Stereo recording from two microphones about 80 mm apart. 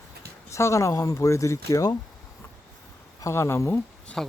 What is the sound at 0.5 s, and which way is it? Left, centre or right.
Speech, left.